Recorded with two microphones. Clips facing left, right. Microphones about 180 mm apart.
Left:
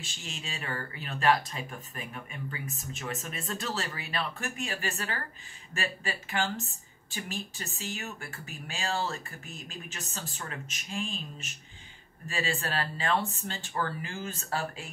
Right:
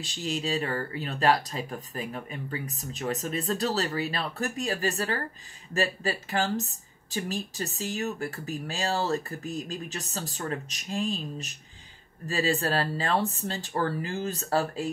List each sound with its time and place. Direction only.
0.0 s speech: 35° right (ahead or behind)